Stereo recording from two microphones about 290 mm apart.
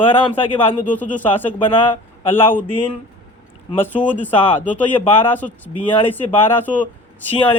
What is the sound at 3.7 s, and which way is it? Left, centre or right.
Speech, centre.